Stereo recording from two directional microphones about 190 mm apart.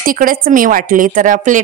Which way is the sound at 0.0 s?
45° right (ahead or behind).